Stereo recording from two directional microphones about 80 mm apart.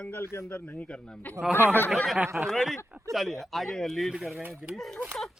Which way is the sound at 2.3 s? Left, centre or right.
Centre.